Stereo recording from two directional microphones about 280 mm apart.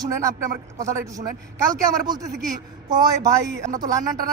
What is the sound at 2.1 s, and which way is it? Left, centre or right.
A man's voice, centre.